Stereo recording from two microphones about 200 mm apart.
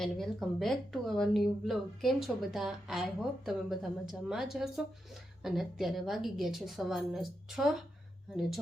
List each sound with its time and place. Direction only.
0.0 s speech: centre (ahead or behind)